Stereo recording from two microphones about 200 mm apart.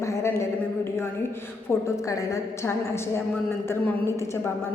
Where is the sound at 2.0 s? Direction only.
15° left (ahead or behind).